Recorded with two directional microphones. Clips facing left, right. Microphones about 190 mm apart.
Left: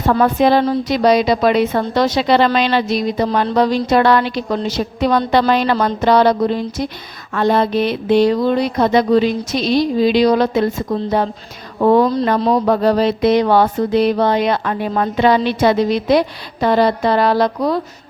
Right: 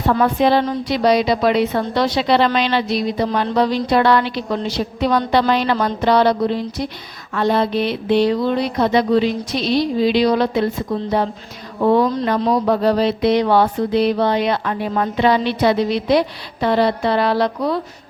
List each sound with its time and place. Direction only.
0.2 s a woman's voice: 45° left (ahead or behind)